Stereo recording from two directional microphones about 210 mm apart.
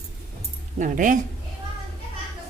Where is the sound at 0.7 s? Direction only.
35° right (ahead or behind).